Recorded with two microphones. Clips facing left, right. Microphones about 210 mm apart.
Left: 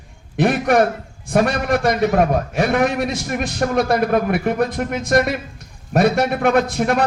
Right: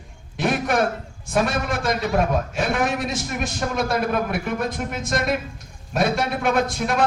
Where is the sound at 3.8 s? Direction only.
55° left (ahead or behind).